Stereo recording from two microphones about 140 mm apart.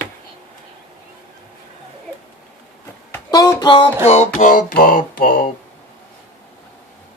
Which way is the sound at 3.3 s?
30° left (ahead or behind).